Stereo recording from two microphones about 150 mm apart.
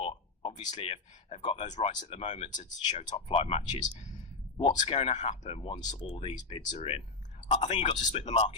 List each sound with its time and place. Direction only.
0.0 s speech: 40° left (ahead or behind)
2.0 s speech: 45° left (ahead or behind)
3.2 s speech: 40° left (ahead or behind)
4.8 s speech: 45° left (ahead or behind)
5.7 s speech: 30° left (ahead or behind)
6.1 s speech: 40° left (ahead or behind)